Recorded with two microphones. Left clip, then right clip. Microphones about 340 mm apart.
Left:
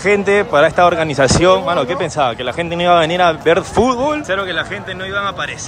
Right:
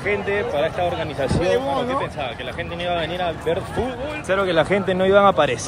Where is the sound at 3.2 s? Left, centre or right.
Left.